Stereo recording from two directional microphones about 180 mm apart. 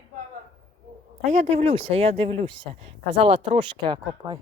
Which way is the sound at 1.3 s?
40° right (ahead or behind).